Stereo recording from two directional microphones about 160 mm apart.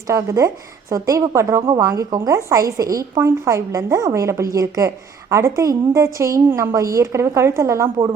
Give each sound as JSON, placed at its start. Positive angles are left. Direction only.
{"t": 0.1, "sound": "a woman's voice", "side_deg": -20}
{"t": 1.6, "sound": "a woman's voice", "side_deg": -30}